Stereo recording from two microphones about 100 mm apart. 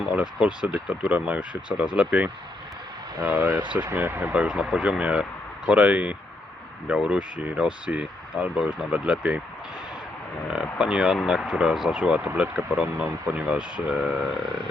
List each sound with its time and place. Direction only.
0.4 s speech: 10° right (ahead or behind)
10.5 s speech: 10° right (ahead or behind)